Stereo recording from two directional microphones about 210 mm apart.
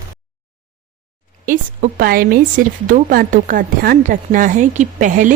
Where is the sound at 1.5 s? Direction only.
40° right (ahead or behind).